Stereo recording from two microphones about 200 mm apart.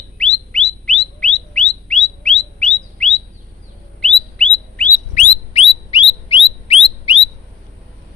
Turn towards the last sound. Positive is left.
turn(degrees=25)  # may be behind; listen again after turning